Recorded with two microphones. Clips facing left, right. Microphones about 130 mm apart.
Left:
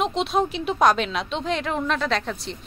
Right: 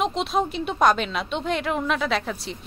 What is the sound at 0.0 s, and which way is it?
A woman's voice, centre (ahead or behind).